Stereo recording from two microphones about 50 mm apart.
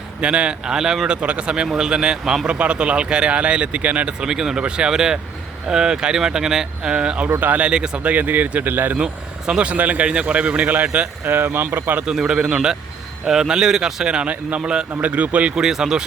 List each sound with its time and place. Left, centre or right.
0.2 s speech: right
4.4 s speech: centre
7.3 s speech: right
7.6 s speech: centre; by 9.0 s right
9.5 s speech: right
11.3 s speech: right
12.1 s speech: centre
14.3 s speech: right
15.5 s speech: centre